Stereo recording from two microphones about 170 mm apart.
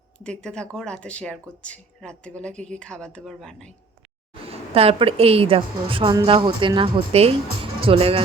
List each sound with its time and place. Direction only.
0.2 s speech: 5° left (ahead or behind)
4.7 s a woman's voice: 35° right (ahead or behind)
7.6 s music: 30° right (ahead or behind)